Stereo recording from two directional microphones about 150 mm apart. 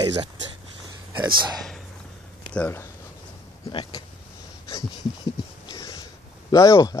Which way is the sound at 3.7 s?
35° left (ahead or behind).